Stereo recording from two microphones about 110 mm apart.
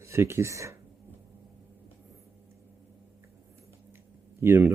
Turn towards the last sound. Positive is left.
turn(degrees=-20)  # may be behind; listen again after turning